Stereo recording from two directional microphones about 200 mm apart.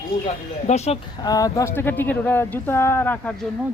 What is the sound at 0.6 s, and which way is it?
Speech, 35° left (ahead or behind).